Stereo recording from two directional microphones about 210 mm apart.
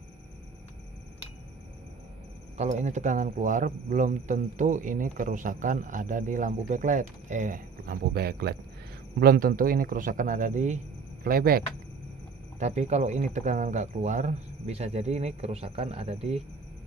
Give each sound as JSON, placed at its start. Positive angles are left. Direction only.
{"t": 2.5, "sound": "speech", "side_deg": -35}
{"t": 12.5, "sound": "speech", "side_deg": -35}